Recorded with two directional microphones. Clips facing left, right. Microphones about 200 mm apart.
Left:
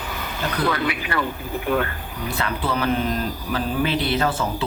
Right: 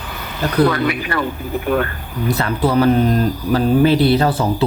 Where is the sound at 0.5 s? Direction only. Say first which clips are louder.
Right 8 dB; 40° right (ahead or behind).